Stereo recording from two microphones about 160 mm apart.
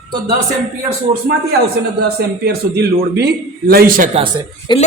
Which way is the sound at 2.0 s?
75° right (ahead or behind).